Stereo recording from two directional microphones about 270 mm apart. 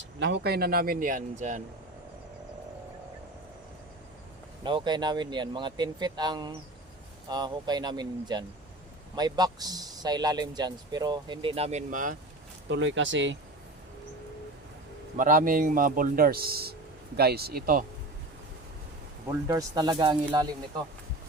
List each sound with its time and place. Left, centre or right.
0.0 s speech: right
4.6 s speech: centre
12.6 s speech: right
15.2 s speech: right
19.3 s speech: centre